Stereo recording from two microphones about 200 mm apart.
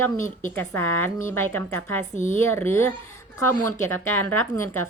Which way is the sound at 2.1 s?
35° left (ahead or behind).